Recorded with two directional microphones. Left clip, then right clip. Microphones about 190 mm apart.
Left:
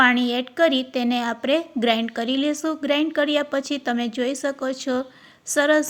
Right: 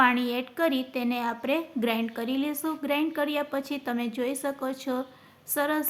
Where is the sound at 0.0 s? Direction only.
20° left (ahead or behind).